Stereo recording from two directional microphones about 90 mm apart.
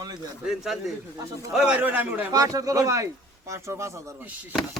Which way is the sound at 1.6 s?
15° right (ahead or behind).